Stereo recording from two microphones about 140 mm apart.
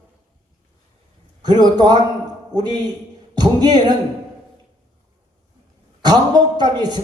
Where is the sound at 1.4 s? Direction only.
30° right (ahead or behind).